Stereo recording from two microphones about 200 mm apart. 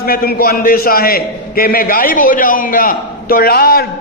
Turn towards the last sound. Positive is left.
turn(degrees=50)  # may be behind; listen again after turning